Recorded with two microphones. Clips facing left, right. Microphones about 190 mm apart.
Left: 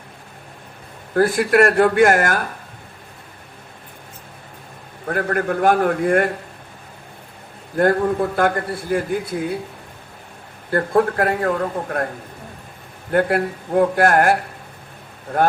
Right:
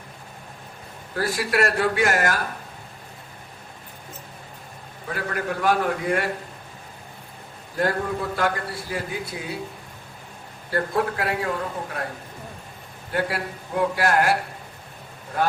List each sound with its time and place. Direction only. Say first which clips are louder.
1.1 s a man's voice: left 9 dB; 50° left (ahead or behind)
5.0 s a man's voice: left 7 dB; 55° left (ahead or behind)
7.8 s a man's voice: left 8 dB; 55° left (ahead or behind)
10.7 s a man's voice: left 6 dB; 50° left (ahead or behind)
13.1 s a man's voice: left 8 dB; 55° left (ahead or behind)
15.3 s speech: left 6 dB; 55° left (ahead or behind)